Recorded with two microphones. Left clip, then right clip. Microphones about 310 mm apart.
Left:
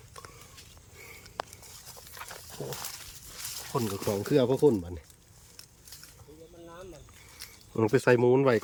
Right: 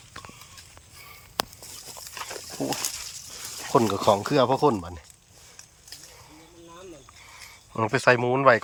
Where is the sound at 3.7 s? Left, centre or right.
Right.